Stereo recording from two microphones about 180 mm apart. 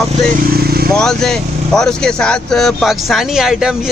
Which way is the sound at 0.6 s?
60° right (ahead or behind).